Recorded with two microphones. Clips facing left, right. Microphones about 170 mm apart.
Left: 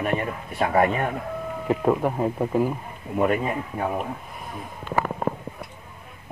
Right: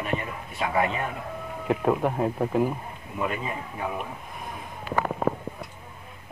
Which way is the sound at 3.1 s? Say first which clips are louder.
Left 7 dB; 50° left (ahead or behind).